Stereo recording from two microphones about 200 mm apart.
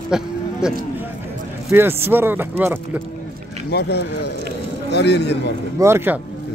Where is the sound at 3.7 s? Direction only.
55° left (ahead or behind).